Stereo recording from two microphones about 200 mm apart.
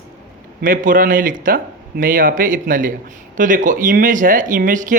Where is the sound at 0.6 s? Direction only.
40° right (ahead or behind).